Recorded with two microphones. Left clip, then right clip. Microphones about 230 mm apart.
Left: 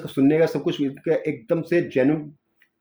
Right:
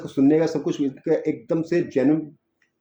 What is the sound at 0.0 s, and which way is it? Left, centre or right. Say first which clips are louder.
Speech: even; left.